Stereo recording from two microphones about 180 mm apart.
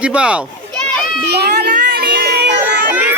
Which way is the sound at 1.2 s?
65° right (ahead or behind).